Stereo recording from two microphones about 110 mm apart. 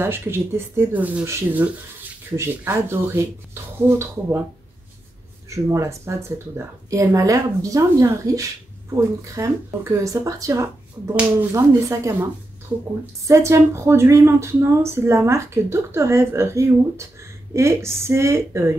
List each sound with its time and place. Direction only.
0.0 s speech: 20° right (ahead or behind)
5.5 s speech: 25° right (ahead or behind)
13.3 s speech: 25° right (ahead or behind)